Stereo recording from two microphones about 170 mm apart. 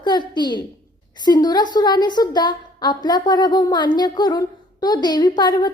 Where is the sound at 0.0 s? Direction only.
25° left (ahead or behind).